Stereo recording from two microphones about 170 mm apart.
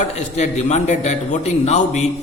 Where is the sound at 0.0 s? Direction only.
45° left (ahead or behind).